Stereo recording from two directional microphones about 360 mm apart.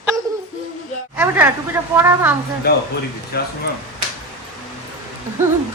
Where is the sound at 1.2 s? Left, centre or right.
Centre.